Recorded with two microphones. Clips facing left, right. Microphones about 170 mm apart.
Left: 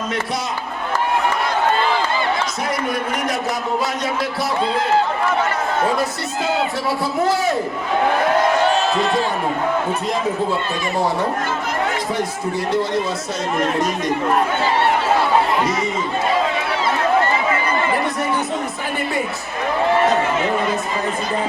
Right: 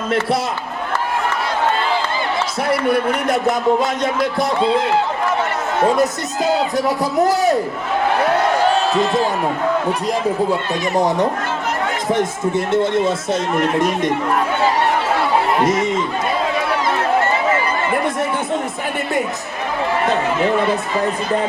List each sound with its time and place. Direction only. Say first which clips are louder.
3.8 s speech: right 3 dB; 50° right (ahead or behind)
6.0 s speech: right 4 dB; 40° right (ahead or behind)
10.9 s speech: right 3 dB; 20° right (ahead or behind)
15.6 s speech: right 4 dB; 45° right (ahead or behind)